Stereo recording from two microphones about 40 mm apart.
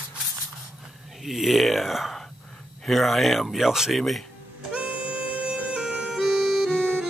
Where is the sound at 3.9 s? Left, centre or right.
Centre.